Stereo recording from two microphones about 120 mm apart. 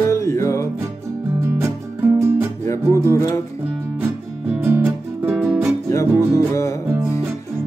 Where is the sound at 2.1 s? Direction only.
20° right (ahead or behind).